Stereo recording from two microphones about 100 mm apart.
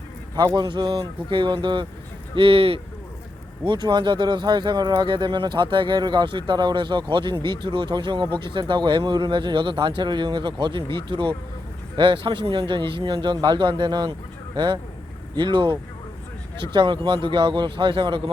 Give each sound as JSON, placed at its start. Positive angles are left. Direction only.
{"t": 0.3, "sound": "speech", "side_deg": -45}
{"t": 2.3, "sound": "speech", "side_deg": -65}
{"t": 3.6, "sound": "speech", "side_deg": -50}